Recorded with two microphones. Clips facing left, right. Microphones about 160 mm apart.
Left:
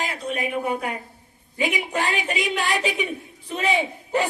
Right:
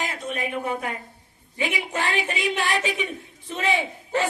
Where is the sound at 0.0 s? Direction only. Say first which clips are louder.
Left 2 dB; 20° left (ahead or behind).